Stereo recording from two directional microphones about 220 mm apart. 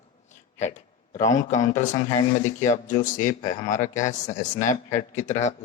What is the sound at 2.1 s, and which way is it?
A man's voice, 20° left (ahead or behind).